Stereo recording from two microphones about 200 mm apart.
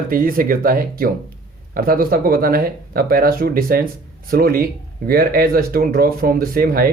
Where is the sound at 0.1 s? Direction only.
45° right (ahead or behind).